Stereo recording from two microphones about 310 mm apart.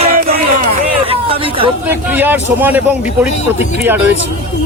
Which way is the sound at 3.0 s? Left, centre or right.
Left.